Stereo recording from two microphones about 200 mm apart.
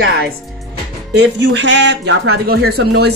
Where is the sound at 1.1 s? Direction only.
60° right (ahead or behind).